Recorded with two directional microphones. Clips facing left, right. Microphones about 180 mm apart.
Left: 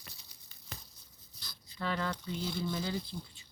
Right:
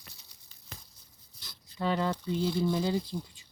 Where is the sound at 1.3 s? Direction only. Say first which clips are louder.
Even; 20° right (ahead or behind).